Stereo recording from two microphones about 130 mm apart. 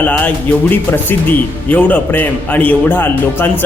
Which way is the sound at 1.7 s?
15° left (ahead or behind).